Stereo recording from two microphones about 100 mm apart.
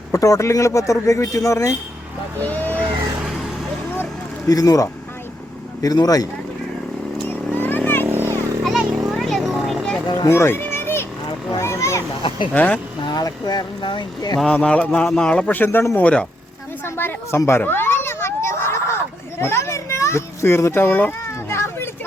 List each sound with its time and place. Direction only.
0.1 s speech: 35° left (ahead or behind)
2.4 s speech: 20° left (ahead or behind)
3.2 s vehicle: 5° right (ahead or behind)
4.4 s speech: 35° left (ahead or behind)
7.3 s vehicle: 20° left (ahead or behind)
8.0 s vehicle: 25° right (ahead or behind)
8.6 s a sound: centre (ahead or behind)
10.2 s children playing: 25° left (ahead or behind)
11.5 s a sound: 30° left (ahead or behind)
12.5 s speech: 15° left (ahead or behind)
13.0 s speech: 45° left (ahead or behind)
14.3 s speech: 10° left (ahead or behind)
16.8 s children playing: 20° left (ahead or behind)